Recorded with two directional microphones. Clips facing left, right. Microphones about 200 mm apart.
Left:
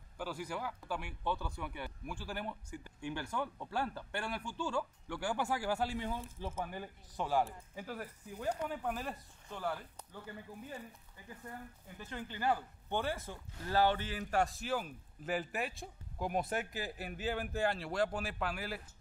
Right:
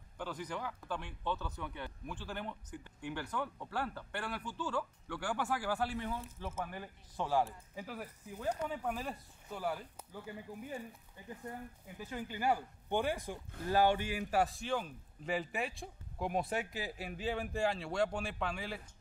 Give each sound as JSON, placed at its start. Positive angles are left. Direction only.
{"t": 0.2, "sound": "speech", "side_deg": 10}
{"t": 7.2, "sound": "a man's voice", "side_deg": 0}
{"t": 11.2, "sound": "speech", "side_deg": -20}
{"t": 12.0, "sound": "a man's voice", "side_deg": -10}